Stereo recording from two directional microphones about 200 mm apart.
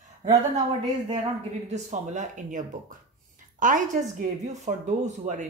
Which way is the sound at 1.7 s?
35° right (ahead or behind).